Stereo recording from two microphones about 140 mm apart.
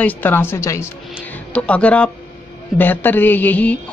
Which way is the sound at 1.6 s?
10° left (ahead or behind).